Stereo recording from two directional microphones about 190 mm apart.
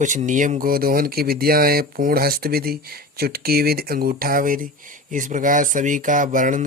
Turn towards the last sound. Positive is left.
turn(degrees=-45)  # may be behind; listen again after turning